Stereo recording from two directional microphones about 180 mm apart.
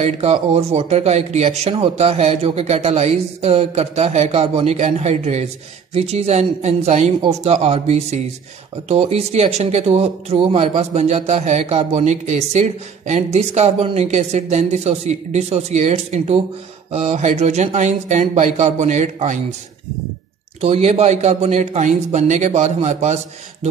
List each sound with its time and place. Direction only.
0.0 s speech: 35° right (ahead or behind)
20.6 s speech: 35° right (ahead or behind)